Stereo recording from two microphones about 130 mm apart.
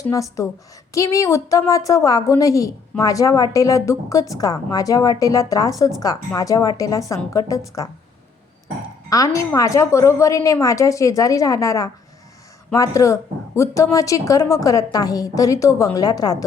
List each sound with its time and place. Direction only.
0.0 s a woman's voice: 25° left (ahead or behind)
9.0 s a woman's voice: 25° left (ahead or behind)